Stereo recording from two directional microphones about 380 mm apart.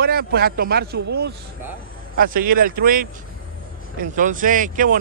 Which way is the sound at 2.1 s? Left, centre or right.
Right.